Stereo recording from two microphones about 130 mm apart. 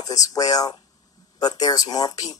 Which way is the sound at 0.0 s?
25° left (ahead or behind).